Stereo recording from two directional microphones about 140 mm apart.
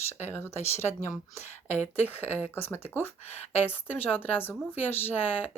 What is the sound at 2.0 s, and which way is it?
A woman's voice, 15° left (ahead or behind).